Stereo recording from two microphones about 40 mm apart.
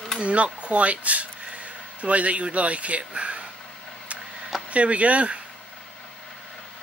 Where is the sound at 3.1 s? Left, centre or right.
Right.